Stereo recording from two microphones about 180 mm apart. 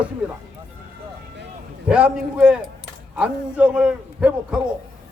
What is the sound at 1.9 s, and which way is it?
A man's voice, 5° right (ahead or behind).